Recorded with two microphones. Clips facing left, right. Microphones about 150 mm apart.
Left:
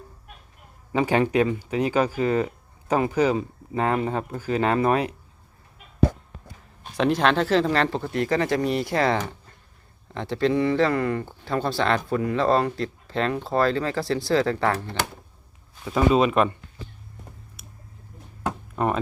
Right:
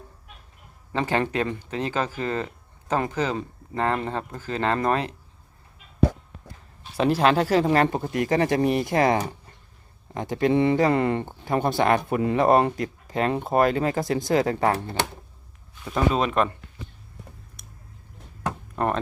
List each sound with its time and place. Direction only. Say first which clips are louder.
0.9 s speech: left 4 dB; 15° left (ahead or behind)
6.9 s speech: right 1 dB; 5° right (ahead or behind); by 15.0 s 25° right (ahead or behind)
16.1 s speech: left 5 dB; 5° left (ahead or behind)
18.8 s a sound: left 1 dB; centre (ahead or behind)